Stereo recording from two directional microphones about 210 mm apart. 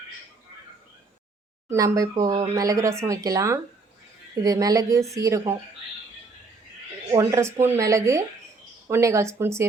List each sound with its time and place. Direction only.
1.7 s speech: 15° right (ahead or behind)
7.1 s speech: 15° right (ahead or behind)